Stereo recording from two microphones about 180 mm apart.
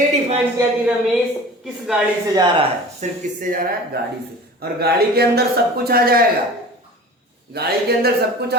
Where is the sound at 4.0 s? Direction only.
60° right (ahead or behind).